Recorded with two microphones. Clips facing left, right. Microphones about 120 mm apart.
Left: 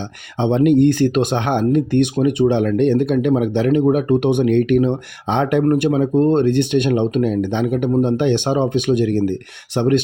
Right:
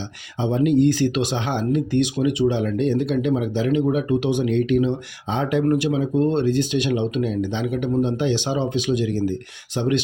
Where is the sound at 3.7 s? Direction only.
50° left (ahead or behind).